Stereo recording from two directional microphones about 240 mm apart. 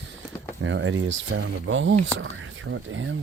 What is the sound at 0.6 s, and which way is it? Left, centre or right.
Speech, right.